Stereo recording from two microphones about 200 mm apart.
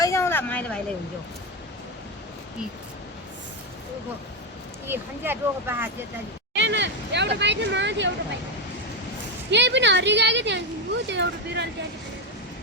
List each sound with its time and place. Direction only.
0.0 s a sound: 15° left (ahead or behind)
4.9 s speech: 10° right (ahead or behind)
6.5 s speech: 60° right (ahead or behind)
9.5 s speech: 60° right (ahead or behind)